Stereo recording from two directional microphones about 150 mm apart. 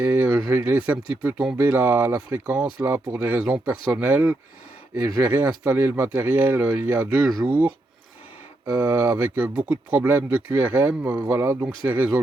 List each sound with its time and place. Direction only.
0.0 s a sound: 10° right (ahead or behind)
0.3 s speech: 25° right (ahead or behind)
0.6 s speech: 10° right (ahead or behind)
8.7 s speech: 10° right (ahead or behind)